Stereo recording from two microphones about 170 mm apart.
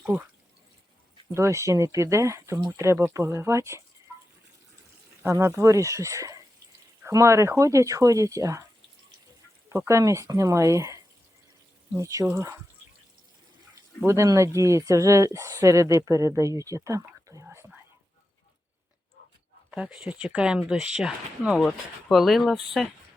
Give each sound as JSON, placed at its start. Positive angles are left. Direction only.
{"t": 0.0, "sound": "speech", "side_deg": -10}
{"t": 1.3, "sound": "speech", "side_deg": -15}
{"t": 5.2, "sound": "speech", "side_deg": -15}
{"t": 9.6, "sound": "speech", "side_deg": -15}
{"t": 14.0, "sound": "speech", "side_deg": -15}
{"t": 19.7, "sound": "speech", "side_deg": -5}